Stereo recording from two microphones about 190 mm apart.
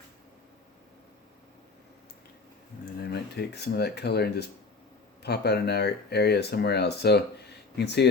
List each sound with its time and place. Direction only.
3.1 s speech: 60° left (ahead or behind)